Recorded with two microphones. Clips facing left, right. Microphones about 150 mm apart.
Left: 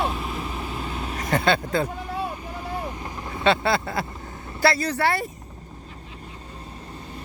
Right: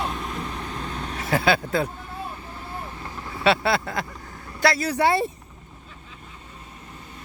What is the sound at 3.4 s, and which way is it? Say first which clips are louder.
Speech: even; 5° right (ahead or behind).